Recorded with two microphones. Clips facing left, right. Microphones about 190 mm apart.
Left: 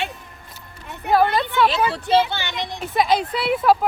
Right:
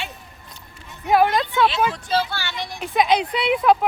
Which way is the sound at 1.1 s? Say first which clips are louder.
Even; centre (ahead or behind).